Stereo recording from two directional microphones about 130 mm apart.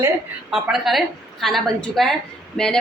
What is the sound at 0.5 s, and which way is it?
A woman's voice, centre (ahead or behind).